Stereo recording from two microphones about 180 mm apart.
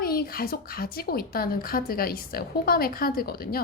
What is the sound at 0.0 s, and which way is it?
A woman's voice, 55° left (ahead or behind).